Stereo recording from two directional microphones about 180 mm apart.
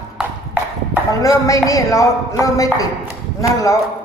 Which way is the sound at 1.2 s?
20° left (ahead or behind).